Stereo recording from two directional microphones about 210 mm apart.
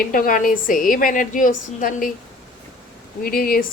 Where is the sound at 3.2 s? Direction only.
45° left (ahead or behind).